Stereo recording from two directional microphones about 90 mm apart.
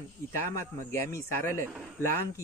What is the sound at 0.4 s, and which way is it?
A man's voice, 35° left (ahead or behind).